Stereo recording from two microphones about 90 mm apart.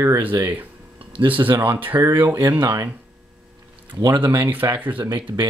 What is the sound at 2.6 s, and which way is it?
Speech, 40° right (ahead or behind).